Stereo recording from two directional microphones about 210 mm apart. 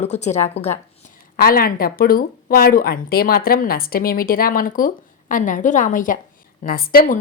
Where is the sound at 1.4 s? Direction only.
45° left (ahead or behind).